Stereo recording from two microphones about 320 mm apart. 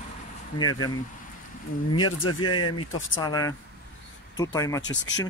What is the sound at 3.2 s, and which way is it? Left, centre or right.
Speech, centre.